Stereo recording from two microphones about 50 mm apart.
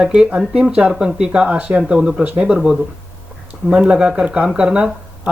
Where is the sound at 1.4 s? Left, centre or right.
Right.